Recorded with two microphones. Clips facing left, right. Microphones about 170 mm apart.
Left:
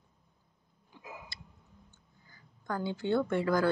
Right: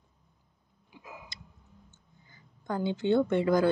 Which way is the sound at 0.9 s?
10° right (ahead or behind).